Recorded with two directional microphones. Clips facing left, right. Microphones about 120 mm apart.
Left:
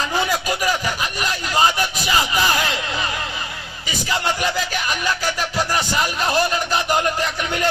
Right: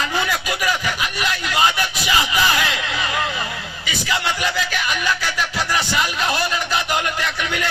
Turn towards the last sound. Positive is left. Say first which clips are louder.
# left 2 dB
turn(degrees=40)  # may be behind; listen again after turning